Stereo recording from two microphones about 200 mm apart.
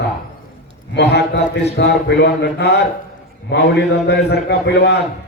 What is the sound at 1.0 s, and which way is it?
A man's voice, 55° left (ahead or behind).